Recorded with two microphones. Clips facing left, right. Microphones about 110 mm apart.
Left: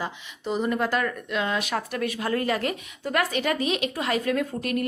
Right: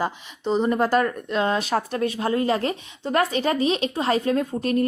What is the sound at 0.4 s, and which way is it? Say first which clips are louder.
Speech: right 4 dB; 30° right (ahead or behind).